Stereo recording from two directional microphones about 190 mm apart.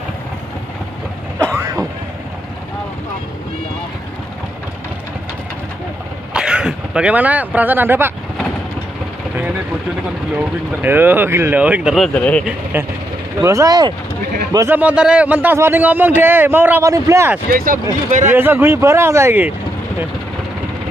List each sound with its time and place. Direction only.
1.4 s vehicle: 10° right (ahead or behind)
6.3 s speech: 5° right (ahead or behind)
10.3 s a man's voice: 10° right (ahead or behind)
13.4 s a man's voice: 15° right (ahead or behind)
17.5 s speech: 50° right (ahead or behind)
18.3 s a man's voice: 10° right (ahead or behind)